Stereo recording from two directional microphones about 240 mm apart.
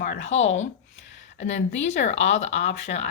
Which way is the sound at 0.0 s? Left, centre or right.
Left.